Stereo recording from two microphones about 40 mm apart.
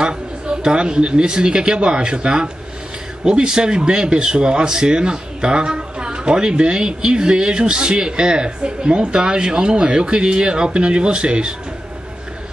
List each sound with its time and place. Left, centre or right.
0.0 s a man's voice: right